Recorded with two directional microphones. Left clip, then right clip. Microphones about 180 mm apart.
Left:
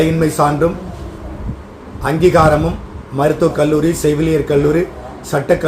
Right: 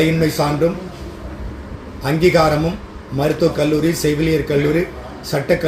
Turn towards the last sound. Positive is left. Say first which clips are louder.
# left 3 dB
turn(degrees=10)  # may be behind; listen again after turning